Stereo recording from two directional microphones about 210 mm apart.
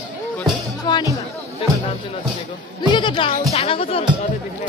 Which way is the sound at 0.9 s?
20° left (ahead or behind).